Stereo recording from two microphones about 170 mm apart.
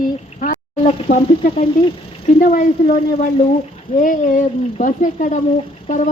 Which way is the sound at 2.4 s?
45° left (ahead or behind).